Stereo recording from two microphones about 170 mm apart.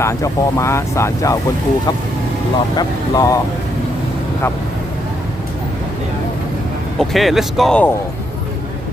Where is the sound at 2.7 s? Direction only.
25° left (ahead or behind).